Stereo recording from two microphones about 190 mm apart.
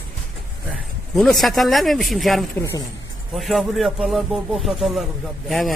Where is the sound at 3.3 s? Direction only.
Centre (ahead or behind).